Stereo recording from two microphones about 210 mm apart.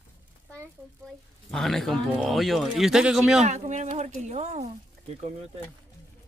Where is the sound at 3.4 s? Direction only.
35° right (ahead or behind).